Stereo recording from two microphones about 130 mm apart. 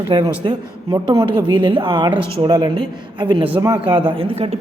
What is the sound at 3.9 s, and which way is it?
Speech, 40° right (ahead or behind).